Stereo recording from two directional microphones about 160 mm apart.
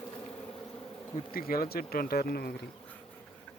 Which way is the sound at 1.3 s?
65° left (ahead or behind).